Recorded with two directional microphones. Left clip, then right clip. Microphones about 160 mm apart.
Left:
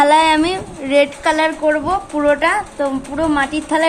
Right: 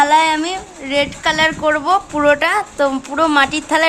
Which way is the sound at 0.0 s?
Centre (ahead or behind).